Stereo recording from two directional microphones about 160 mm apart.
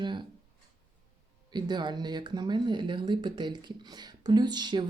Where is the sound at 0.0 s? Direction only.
30° right (ahead or behind).